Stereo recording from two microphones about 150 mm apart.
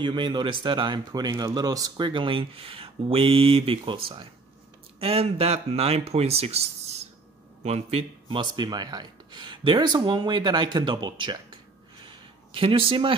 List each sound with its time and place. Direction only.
0.0 s speech: 30° right (ahead or behind)
5.0 s speech: 40° right (ahead or behind)
12.1 s a sound: 35° right (ahead or behind)